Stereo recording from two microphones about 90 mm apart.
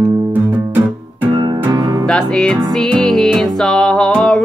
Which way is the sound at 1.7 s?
45° right (ahead or behind).